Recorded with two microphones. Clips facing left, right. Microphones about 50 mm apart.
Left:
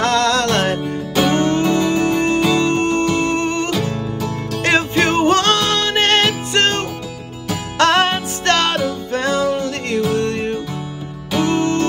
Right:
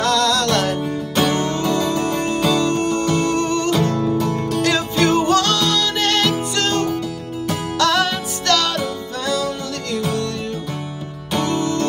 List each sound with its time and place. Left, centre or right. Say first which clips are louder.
0.0 s music: left 2 dB; left
4.6 s music: left 3 dB; left
11.4 s music: left 4 dB; left